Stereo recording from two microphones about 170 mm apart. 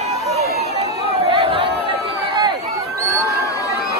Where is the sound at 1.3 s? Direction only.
30° right (ahead or behind).